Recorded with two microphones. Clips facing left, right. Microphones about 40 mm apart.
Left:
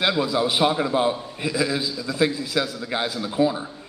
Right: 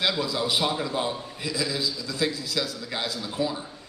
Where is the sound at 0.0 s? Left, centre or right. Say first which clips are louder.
Left 5 dB; left.